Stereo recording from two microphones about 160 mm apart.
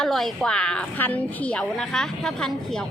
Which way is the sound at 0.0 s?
Centre (ahead or behind).